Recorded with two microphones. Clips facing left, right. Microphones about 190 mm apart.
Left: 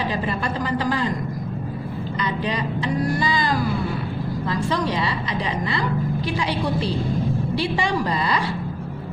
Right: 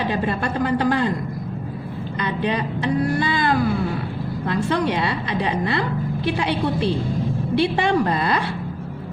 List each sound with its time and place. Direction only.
0.1 s a woman's voice: 60° right (ahead or behind)
2.2 s a woman's voice: 60° right (ahead or behind)